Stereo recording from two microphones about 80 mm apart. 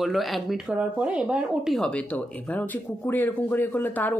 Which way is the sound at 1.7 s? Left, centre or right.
Centre.